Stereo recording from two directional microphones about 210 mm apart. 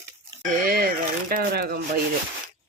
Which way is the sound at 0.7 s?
45° right (ahead or behind).